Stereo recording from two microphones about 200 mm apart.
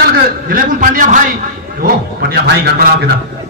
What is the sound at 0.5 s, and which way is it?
Speech, 45° right (ahead or behind).